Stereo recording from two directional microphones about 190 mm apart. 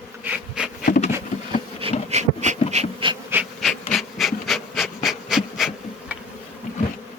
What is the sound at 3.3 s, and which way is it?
Bee, 10° right (ahead or behind).